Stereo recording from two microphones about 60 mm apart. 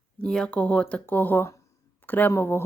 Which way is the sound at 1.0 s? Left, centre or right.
Left.